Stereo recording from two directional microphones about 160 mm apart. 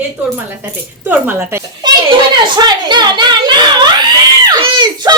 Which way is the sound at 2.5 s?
25° right (ahead or behind).